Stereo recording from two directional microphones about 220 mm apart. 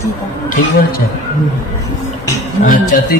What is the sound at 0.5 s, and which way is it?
Speech, 40° left (ahead or behind).